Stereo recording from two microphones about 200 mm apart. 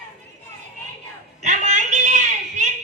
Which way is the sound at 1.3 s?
35° right (ahead or behind).